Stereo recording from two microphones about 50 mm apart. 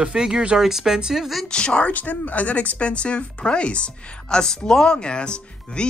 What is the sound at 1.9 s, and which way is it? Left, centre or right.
Speech, left.